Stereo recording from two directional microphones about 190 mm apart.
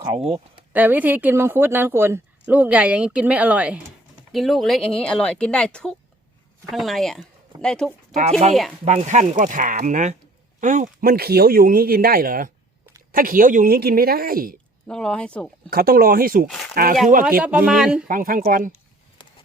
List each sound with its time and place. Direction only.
0.0 s speech: 30° right (ahead or behind)
0.3 s speech: 10° right (ahead or behind)
8.2 s speech: 35° right (ahead or behind)
14.8 s speech: 5° left (ahead or behind)
15.7 s speech: 50° right (ahead or behind)
16.5 s speech: centre (ahead or behind)
16.7 s speech: 50° right (ahead or behind)
17.4 s speech: 5° right (ahead or behind)
18.1 s speech: 45° right (ahead or behind)